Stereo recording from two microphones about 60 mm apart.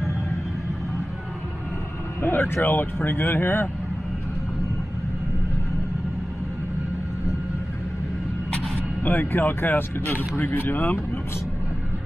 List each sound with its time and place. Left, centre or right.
2.2 s speech: left
9.0 s speech: left